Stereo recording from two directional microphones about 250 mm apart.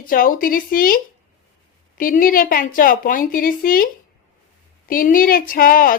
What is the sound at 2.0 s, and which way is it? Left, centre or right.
Speech, left.